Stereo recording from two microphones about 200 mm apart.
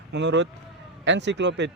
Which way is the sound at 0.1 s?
60° right (ahead or behind).